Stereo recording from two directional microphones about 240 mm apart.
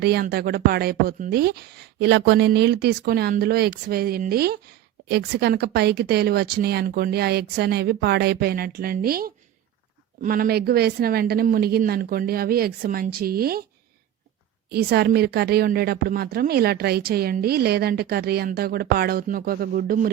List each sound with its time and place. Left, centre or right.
0.0 s a woman's voice: right
14.7 s a woman's voice: right